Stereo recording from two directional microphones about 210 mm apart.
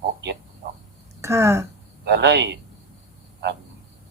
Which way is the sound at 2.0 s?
55° right (ahead or behind).